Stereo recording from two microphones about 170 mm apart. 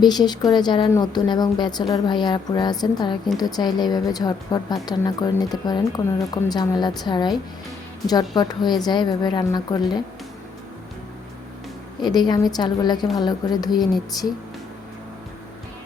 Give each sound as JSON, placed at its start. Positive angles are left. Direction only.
{"t": 0.0, "sound": "a woman's voice", "side_deg": 25}
{"t": 8.4, "sound": "a woman's voice", "side_deg": 25}
{"t": 12.0, "sound": "a woman's voice", "side_deg": 25}